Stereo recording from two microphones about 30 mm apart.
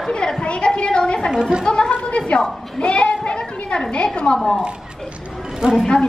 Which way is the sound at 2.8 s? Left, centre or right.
Left.